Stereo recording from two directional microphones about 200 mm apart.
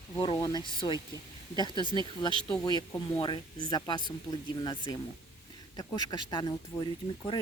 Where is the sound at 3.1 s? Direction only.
20° left (ahead or behind).